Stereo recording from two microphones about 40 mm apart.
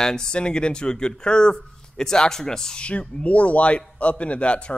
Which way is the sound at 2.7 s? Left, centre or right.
Left.